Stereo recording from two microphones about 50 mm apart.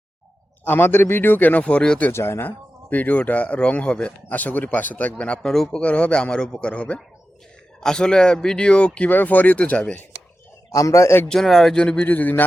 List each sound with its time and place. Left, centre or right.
0.6 s a man's voice: left
1.6 s speech: left
2.1 s speech: left
2.9 s speech: left
4.3 s speech: left
5.4 s a man's voice: centre
5.8 s a man's voice: left
9.0 s speech: left
10.8 s a man's voice: left
11.3 s speech: centre
11.8 s speech: centre
12.0 s speech: left